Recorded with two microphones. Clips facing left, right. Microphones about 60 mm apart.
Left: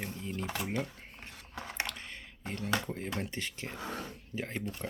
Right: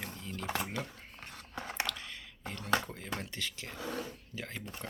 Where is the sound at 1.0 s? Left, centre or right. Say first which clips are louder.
Even; left.